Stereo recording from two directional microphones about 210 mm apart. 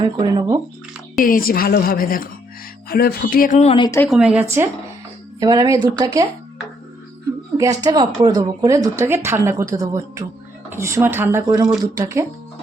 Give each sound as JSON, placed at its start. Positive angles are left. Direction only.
{"t": 0.0, "sound": "speech", "side_deg": -20}
{"t": 1.2, "sound": "a woman's voice", "side_deg": 40}
{"t": 4.1, "sound": "a woman's voice", "side_deg": -5}
{"t": 7.5, "sound": "a woman's voice", "side_deg": -15}